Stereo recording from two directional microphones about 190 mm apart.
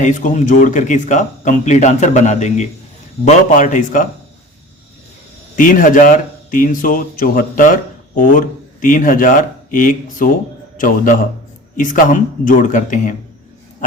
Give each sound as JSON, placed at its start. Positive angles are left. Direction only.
{"t": 0.0, "sound": "speech", "side_deg": 40}
{"t": 5.5, "sound": "a man's voice", "side_deg": 45}